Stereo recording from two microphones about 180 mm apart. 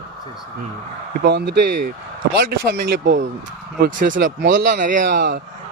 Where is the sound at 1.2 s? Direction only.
65° right (ahead or behind).